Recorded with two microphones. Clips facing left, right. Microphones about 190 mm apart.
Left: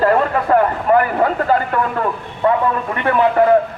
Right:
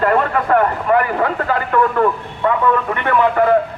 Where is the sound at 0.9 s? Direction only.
35° left (ahead or behind).